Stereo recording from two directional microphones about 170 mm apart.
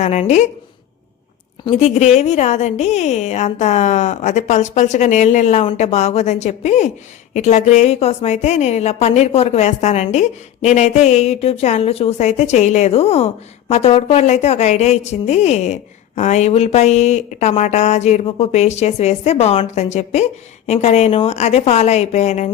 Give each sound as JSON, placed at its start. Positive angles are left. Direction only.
{"t": 0.0, "sound": "a woman's voice", "side_deg": 40}
{"t": 1.8, "sound": "a woman's voice", "side_deg": 40}